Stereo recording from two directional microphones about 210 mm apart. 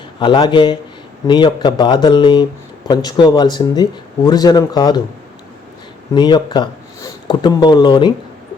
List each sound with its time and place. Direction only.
0.2 s speech: 20° left (ahead or behind)
6.1 s speech: 20° left (ahead or behind)